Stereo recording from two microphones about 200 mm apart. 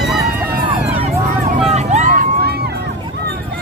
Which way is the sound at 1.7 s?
35° right (ahead or behind).